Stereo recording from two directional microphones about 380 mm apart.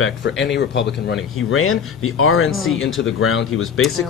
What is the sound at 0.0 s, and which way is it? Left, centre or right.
Speech, left.